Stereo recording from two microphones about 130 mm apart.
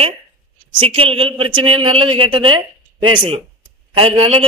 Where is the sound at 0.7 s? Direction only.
45° right (ahead or behind).